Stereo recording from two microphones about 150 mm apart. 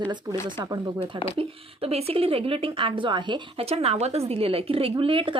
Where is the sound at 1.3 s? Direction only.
40° right (ahead or behind).